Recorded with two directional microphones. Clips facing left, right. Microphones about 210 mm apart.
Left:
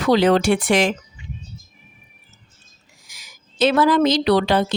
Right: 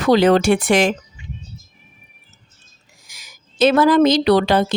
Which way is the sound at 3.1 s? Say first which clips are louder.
Right 1 dB; 45° right (ahead or behind).